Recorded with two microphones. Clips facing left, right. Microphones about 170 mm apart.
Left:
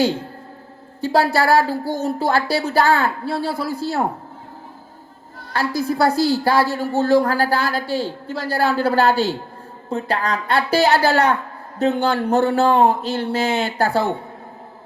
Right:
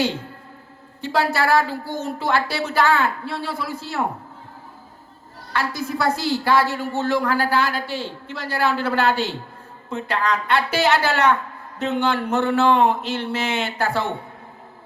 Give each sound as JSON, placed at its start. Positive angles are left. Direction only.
{"t": 1.0, "sound": "a woman's voice", "side_deg": 35}
{"t": 5.5, "sound": "a woman's voice", "side_deg": 35}